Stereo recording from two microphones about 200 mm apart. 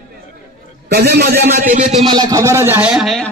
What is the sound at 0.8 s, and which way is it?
A man's voice, 55° right (ahead or behind).